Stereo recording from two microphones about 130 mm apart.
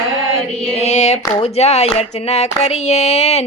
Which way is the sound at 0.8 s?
60° left (ahead or behind).